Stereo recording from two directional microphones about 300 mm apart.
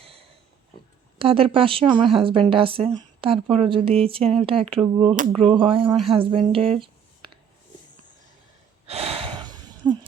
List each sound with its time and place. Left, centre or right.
0.0 s a sound: centre
1.2 s a woman's voice: centre
8.9 s gasp: centre